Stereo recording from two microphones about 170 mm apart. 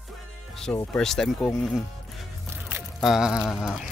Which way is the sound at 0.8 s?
5° left (ahead or behind).